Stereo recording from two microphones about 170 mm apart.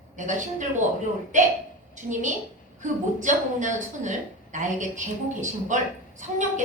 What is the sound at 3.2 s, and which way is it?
A woman's voice, 45° right (ahead or behind).